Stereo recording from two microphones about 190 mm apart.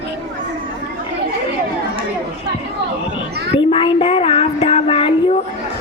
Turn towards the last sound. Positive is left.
turn(degrees=30)  # may be behind; listen again after turning